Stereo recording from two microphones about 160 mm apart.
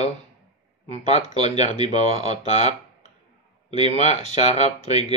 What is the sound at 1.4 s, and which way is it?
Speech, 45° left (ahead or behind).